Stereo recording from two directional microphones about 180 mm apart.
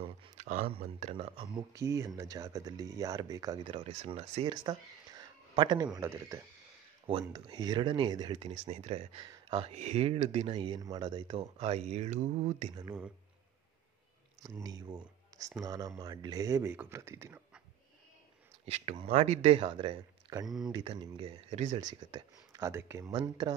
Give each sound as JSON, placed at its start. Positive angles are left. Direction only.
{"t": 0.4, "sound": "a sound", "side_deg": -45}
{"t": 0.7, "sound": "speech", "side_deg": -35}
{"t": 7.1, "sound": "speech", "side_deg": -30}
{"t": 11.5, "sound": "speech", "side_deg": -40}
{"t": 14.4, "sound": "speech", "side_deg": -20}
{"t": 19.0, "sound": "speech", "side_deg": -40}
{"t": 21.8, "sound": "speech", "side_deg": -25}